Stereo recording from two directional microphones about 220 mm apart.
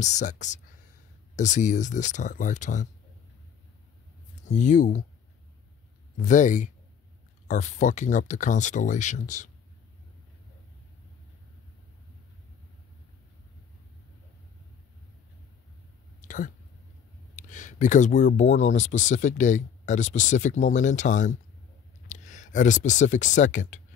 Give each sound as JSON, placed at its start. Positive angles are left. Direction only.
{"t": 0.0, "sound": "speech", "side_deg": 30}
{"t": 4.5, "sound": "speech", "side_deg": 35}
{"t": 6.1, "sound": "speech", "side_deg": 35}
{"t": 16.2, "sound": "a sound", "side_deg": 35}
{"t": 17.4, "sound": "speech", "side_deg": 35}